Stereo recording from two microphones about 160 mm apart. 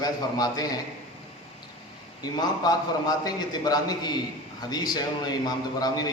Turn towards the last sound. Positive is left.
turn(degrees=25)  # may be behind; listen again after turning